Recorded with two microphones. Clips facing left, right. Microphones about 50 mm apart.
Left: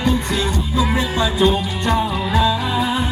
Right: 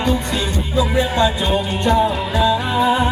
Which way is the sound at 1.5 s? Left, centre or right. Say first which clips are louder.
Right 3 dB; centre.